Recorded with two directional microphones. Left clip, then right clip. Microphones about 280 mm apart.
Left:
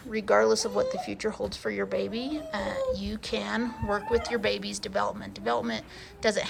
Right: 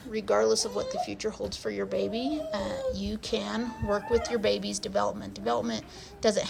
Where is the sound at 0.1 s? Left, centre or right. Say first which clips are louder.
Left 2 dB; centre.